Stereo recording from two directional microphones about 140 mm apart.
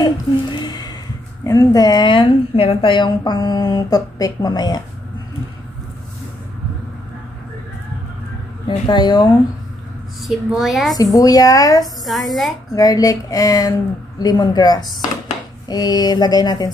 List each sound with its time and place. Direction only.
0.0 s a sound: 30° left (ahead or behind)
1.4 s a woman's voice: 25° left (ahead or behind)
8.6 s speech: 35° left (ahead or behind)
10.2 s a woman's voice: centre (ahead or behind)
11.1 s a woman's voice: 25° left (ahead or behind)
12.0 s a woman's voice: centre (ahead or behind)
12.7 s a woman's voice: 25° left (ahead or behind)